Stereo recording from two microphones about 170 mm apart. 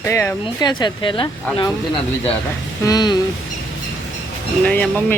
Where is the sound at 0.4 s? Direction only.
25° left (ahead or behind).